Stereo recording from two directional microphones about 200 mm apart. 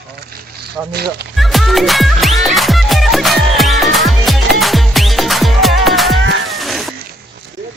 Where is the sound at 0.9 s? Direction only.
55° right (ahead or behind).